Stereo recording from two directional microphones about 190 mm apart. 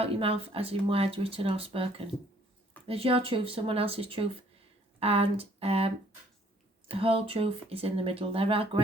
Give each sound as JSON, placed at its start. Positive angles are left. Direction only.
{"t": 0.0, "sound": "speech", "side_deg": -30}
{"t": 6.9, "sound": "speech", "side_deg": -30}